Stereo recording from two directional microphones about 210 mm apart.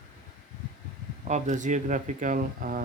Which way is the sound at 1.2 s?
35° right (ahead or behind).